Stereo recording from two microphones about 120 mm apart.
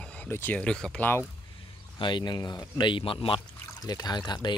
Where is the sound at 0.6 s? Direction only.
5° left (ahead or behind).